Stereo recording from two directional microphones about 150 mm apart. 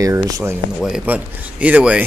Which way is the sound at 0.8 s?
5° right (ahead or behind).